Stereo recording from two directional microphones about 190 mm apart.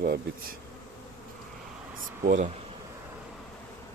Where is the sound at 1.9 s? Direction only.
45° right (ahead or behind).